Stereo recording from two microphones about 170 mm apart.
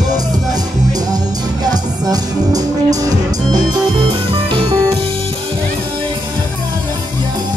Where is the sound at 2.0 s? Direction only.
20° right (ahead or behind).